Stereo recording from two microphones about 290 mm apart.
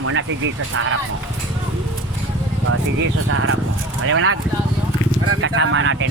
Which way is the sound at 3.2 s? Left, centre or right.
Right.